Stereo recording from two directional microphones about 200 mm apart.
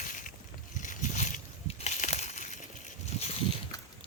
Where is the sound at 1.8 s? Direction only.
35° left (ahead or behind).